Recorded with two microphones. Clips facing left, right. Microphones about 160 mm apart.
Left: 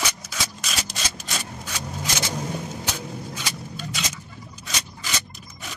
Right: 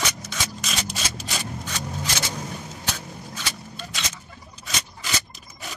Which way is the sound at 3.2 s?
5° left (ahead or behind).